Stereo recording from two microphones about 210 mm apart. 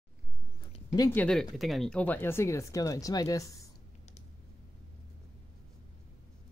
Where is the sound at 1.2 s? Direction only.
Centre (ahead or behind).